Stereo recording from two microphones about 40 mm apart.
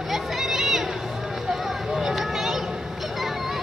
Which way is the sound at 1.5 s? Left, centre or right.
Centre.